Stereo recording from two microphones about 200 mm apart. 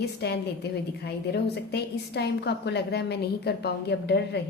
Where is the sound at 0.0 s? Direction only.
55° left (ahead or behind).